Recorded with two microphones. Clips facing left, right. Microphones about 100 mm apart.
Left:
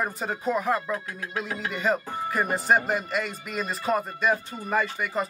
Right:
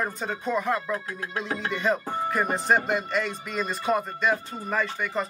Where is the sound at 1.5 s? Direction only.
35° right (ahead or behind).